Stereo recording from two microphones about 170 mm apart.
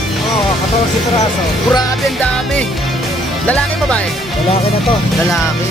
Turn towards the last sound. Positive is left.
turn(degrees=5)  # may be behind; listen again after turning